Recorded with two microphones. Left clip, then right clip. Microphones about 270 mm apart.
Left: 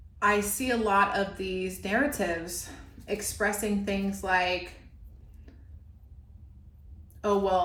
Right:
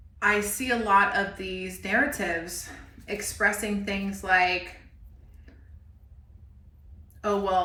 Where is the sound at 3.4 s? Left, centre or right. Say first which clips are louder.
Right 5 dB; centre.